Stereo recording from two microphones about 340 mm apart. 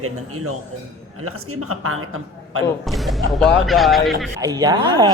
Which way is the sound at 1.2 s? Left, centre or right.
Right.